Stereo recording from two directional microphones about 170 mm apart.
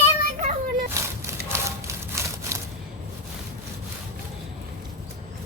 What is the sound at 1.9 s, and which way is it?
Wood, 15° right (ahead or behind).